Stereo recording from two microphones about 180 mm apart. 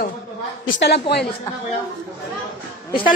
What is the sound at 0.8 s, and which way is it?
Speech, 65° left (ahead or behind).